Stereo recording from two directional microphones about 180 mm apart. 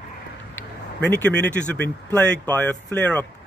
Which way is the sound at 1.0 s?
10° left (ahead or behind).